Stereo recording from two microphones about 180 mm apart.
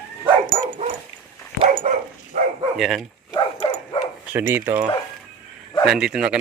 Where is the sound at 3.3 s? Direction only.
25° left (ahead or behind).